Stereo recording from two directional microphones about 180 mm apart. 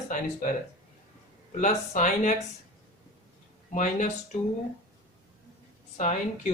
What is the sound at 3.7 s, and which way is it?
Speech, 45° left (ahead or behind).